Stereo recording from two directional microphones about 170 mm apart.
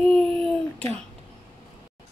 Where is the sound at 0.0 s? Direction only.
5° left (ahead or behind).